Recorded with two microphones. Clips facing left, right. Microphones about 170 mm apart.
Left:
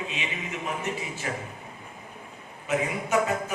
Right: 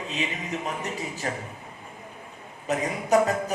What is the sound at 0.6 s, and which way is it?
Speech, 40° right (ahead or behind).